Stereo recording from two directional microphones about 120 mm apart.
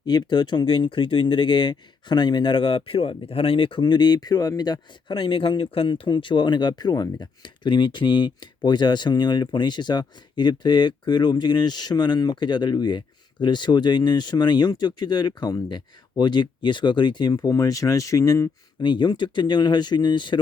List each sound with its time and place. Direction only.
0.0 s speech: 35° left (ahead or behind)
18.8 s speech: 40° left (ahead or behind)